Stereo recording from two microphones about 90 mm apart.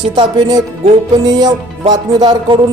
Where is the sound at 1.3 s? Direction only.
45° right (ahead or behind).